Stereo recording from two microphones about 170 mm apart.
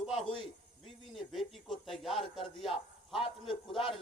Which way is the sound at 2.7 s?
30° left (ahead or behind).